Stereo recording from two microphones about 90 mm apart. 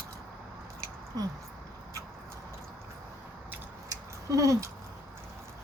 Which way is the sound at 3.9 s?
40° right (ahead or behind).